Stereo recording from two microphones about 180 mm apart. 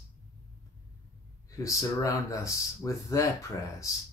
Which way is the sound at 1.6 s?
15° left (ahead or behind).